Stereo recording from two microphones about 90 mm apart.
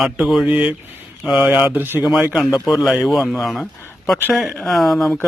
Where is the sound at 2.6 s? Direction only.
Centre (ahead or behind).